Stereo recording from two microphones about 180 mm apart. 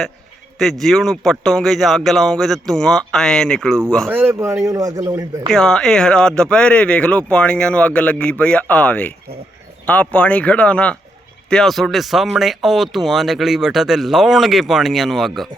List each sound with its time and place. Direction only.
0.6 s speech: centre (ahead or behind)
4.1 s speech: 15° right (ahead or behind)
5.5 s speech: 5° left (ahead or behind)